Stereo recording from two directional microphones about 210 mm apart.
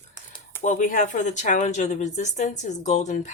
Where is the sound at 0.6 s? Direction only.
35° left (ahead or behind).